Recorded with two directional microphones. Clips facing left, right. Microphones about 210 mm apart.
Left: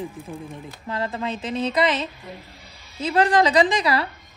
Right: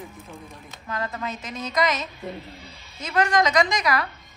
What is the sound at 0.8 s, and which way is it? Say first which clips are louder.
Speech: left 3 dB; 30° left (ahead or behind).